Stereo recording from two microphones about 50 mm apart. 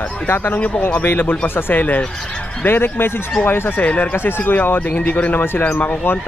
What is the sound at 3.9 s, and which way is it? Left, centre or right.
Speech, left.